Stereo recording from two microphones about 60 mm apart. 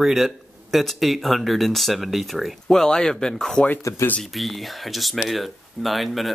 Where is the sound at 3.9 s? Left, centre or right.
Left.